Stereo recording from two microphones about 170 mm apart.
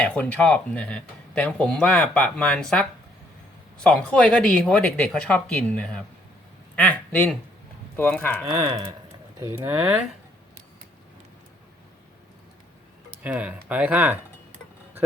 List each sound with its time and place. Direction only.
0.0 s a man's voice: 5° left (ahead or behind)
8.5 s speech: 25° right (ahead or behind)
9.7 s speech: 10° right (ahead or behind)
13.2 s speech: 10° right (ahead or behind)